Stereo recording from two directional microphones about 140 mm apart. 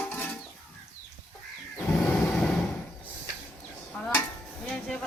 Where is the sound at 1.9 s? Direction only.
10° left (ahead or behind).